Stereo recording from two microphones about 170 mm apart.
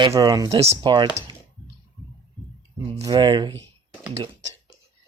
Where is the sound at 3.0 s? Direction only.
25° right (ahead or behind).